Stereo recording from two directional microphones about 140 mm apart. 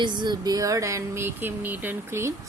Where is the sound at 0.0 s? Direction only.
30° right (ahead or behind).